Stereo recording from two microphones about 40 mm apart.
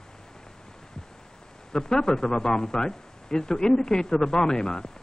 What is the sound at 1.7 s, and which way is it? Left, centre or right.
A man's voice, centre.